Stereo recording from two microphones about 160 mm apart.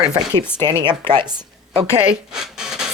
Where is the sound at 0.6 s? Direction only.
30° right (ahead or behind).